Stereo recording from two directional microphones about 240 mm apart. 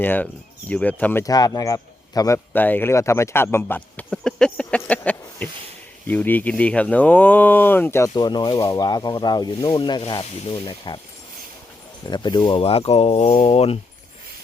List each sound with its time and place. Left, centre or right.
0.0 s speech: centre
12.0 s speech: centre